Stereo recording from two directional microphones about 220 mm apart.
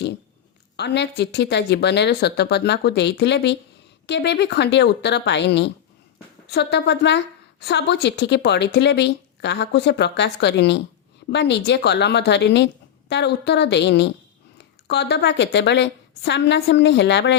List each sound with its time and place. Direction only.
0.8 s speech: 50° left (ahead or behind)